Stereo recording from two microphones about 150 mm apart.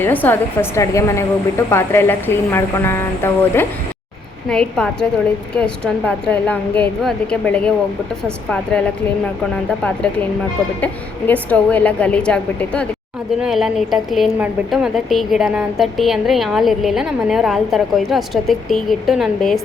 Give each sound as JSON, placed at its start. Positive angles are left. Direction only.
{"t": 0.0, "sound": "a woman's voice", "side_deg": 10}
{"t": 10.8, "sound": "a woman's voice", "side_deg": 10}